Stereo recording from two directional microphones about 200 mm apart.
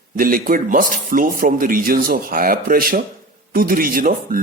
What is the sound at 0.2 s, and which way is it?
A man's voice, 45° right (ahead or behind).